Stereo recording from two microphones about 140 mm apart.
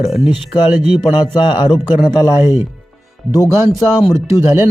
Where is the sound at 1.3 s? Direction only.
35° left (ahead or behind).